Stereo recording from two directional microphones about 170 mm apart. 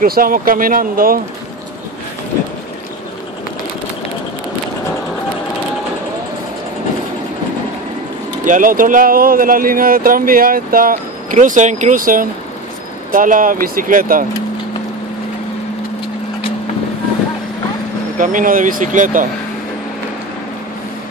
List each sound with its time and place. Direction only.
0.0 s speech: 60° right (ahead or behind)
8.5 s speech: 50° right (ahead or behind)
18.1 s speech: 50° right (ahead or behind)